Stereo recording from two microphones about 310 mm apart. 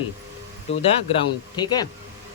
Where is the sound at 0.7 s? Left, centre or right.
Centre.